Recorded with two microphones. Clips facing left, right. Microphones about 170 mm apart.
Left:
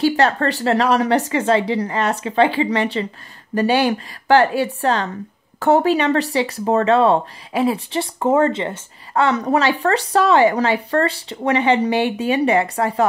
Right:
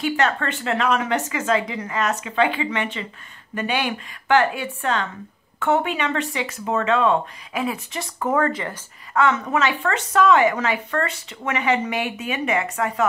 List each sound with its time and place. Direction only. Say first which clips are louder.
0.0 s speech: left 5 dB; 35° left (ahead or behind)